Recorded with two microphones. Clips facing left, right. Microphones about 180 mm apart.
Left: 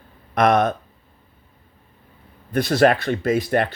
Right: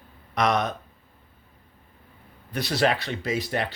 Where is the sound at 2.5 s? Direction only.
50° left (ahead or behind).